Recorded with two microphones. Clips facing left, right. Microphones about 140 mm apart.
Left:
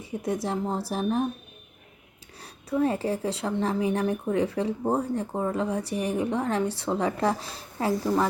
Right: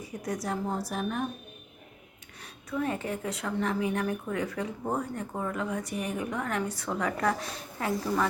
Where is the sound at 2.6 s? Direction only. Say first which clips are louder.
Left 6 dB; 30° left (ahead or behind).